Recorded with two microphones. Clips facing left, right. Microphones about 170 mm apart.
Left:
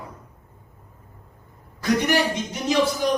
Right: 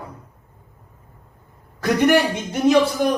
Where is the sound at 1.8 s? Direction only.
55° right (ahead or behind).